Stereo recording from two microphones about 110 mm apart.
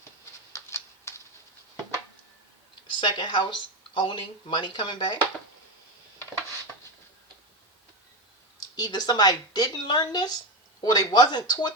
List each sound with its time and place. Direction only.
0.5 s a sound: 25° left (ahead or behind)
3.0 s speech: 45° left (ahead or behind)
8.7 s speech: 40° left (ahead or behind)